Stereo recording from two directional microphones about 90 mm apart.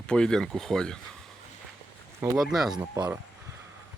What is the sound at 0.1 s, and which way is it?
Speech, 10° left (ahead or behind).